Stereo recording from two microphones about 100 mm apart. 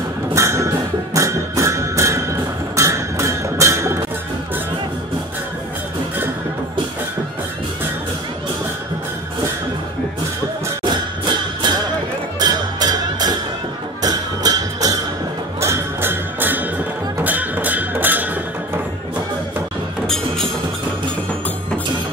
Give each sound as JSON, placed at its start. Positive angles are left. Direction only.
{"t": 0.3, "sound": "music", "side_deg": -30}
{"t": 10.8, "sound": "music", "side_deg": -50}
{"t": 15.6, "sound": "music", "side_deg": -25}